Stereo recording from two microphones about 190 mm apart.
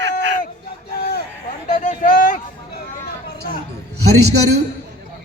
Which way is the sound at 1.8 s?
45° left (ahead or behind).